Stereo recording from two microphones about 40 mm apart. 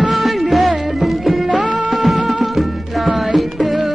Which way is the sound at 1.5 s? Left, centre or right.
Right.